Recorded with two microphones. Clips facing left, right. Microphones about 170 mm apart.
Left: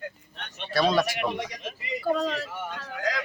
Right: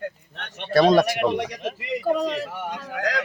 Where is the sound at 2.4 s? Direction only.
60° right (ahead or behind).